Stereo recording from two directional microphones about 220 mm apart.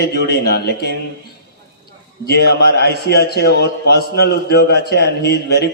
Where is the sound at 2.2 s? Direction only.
45° left (ahead or behind).